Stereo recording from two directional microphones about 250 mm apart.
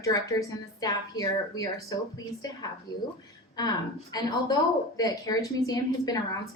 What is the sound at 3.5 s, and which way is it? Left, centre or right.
A woman's voice, centre.